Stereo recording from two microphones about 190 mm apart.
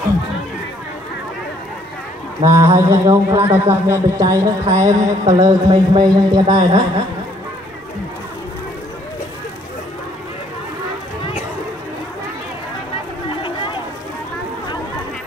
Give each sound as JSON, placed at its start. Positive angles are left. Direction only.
{"t": 2.4, "sound": "speech", "side_deg": -15}